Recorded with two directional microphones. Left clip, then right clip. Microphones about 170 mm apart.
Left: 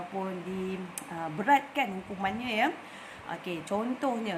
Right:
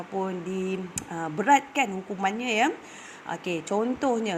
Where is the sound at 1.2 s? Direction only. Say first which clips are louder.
Right 4 dB; 30° right (ahead or behind).